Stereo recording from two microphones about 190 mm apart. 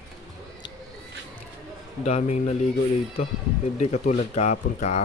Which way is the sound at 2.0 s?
35° left (ahead or behind).